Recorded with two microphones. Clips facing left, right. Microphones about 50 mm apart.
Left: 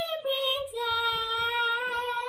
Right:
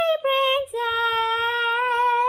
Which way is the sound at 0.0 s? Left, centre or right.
Right.